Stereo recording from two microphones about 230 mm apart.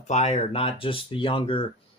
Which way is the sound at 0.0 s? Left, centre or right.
Left.